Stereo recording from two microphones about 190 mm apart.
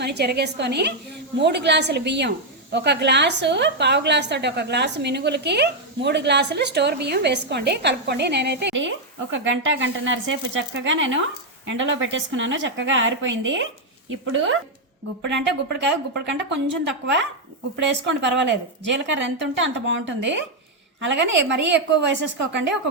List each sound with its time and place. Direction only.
0.0 s a woman's voice: 60° right (ahead or behind); by 13.7 s 75° right (ahead or behind)
14.1 s speech: 90° right
15.4 s a woman's voice: 65° right (ahead or behind)
17.8 s a woman's voice: 65° right (ahead or behind)
19.2 s a woman's voice: 75° right (ahead or behind)